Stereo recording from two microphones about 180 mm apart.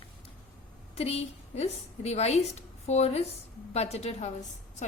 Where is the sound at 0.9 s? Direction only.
35° left (ahead or behind).